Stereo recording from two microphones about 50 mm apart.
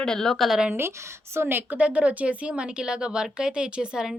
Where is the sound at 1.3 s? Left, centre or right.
Right.